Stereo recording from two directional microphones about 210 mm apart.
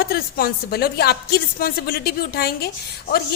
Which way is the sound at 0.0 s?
45° left (ahead or behind).